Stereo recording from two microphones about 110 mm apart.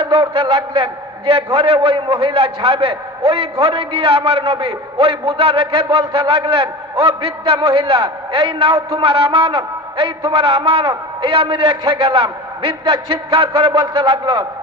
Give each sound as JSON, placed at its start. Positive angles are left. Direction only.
{"t": 0.0, "sound": "a man's voice", "side_deg": -60}